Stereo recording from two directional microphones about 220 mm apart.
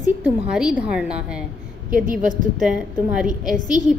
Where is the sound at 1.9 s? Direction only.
40° right (ahead or behind).